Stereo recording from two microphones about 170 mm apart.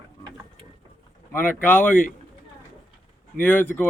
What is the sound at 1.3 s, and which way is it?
Speech, 10° left (ahead or behind).